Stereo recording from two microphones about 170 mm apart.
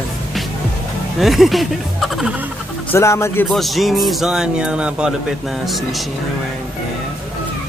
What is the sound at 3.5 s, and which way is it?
Speech, centre (ahead or behind).